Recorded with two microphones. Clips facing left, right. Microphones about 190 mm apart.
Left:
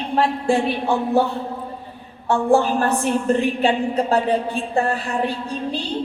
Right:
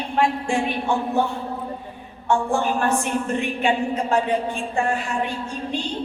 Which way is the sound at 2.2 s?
35° left (ahead or behind).